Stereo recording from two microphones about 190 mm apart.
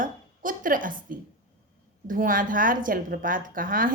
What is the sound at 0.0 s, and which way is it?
A woman's voice, 45° right (ahead or behind).